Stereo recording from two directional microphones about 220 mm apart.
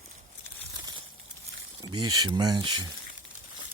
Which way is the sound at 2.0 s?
90° right.